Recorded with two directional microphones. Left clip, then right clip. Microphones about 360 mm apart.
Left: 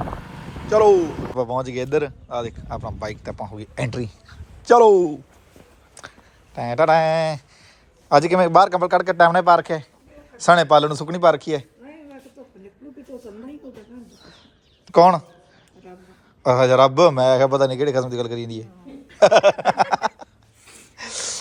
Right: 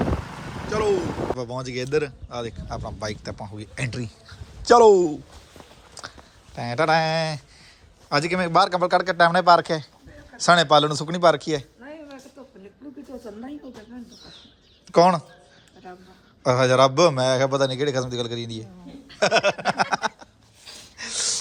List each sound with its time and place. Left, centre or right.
0.7 s a man's voice: centre
14.8 s speech: centre
16.4 s speech: centre
21.0 s gasp: centre